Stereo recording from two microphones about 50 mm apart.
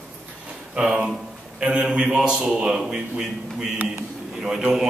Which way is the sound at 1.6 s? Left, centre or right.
Right.